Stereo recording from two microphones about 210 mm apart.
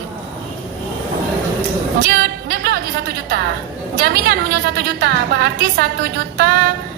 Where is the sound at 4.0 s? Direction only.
50° right (ahead or behind).